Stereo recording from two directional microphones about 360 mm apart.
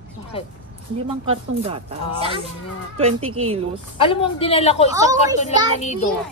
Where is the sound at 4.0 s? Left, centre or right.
Centre.